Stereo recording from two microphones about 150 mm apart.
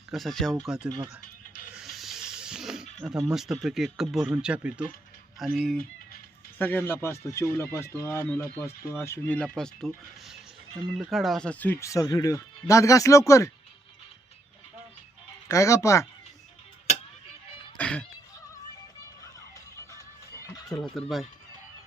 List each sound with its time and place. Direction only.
0.1 s speech: centre (ahead or behind)
1.7 s snake: centre (ahead or behind)
5.4 s speech: centre (ahead or behind)
6.6 s speech: 10° left (ahead or behind)
15.4 s speech: 20° left (ahead or behind)
17.7 s music: 10° left (ahead or behind)
20.7 s speech: centre (ahead or behind)